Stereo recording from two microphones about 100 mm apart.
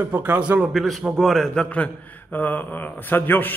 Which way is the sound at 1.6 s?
15° left (ahead or behind).